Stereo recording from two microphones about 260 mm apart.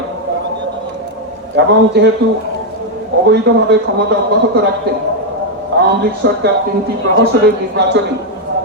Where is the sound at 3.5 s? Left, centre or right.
Right.